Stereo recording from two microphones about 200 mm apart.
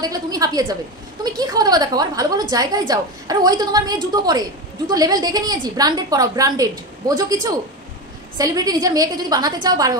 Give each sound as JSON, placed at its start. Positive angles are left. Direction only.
{"t": 0.0, "sound": "a woman's voice", "side_deg": -20}
{"t": 8.4, "sound": "a woman's voice", "side_deg": -15}